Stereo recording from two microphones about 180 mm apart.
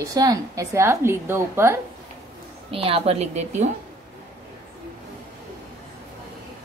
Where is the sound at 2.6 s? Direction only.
30° right (ahead or behind).